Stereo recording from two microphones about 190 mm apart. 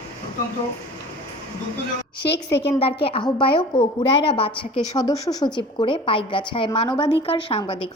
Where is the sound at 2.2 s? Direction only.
65° left (ahead or behind).